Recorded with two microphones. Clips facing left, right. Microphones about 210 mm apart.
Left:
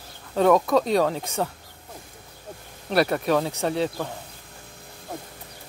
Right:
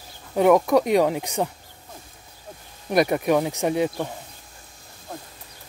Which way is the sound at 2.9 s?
15° right (ahead or behind).